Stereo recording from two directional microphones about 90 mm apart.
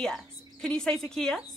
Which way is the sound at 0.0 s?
10° left (ahead or behind).